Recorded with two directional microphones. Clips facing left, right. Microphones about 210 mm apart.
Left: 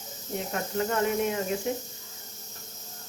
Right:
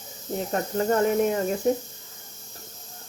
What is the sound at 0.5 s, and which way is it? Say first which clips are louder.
Speech: right 5 dB; 40° right (ahead or behind).